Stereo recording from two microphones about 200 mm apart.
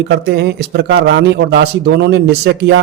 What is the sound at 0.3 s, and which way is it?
A man's voice, 55° right (ahead or behind).